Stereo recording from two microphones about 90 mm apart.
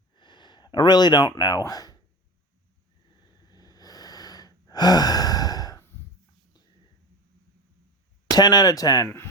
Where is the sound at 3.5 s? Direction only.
45° left (ahead or behind).